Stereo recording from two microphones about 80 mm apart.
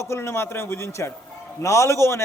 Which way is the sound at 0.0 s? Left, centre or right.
Left.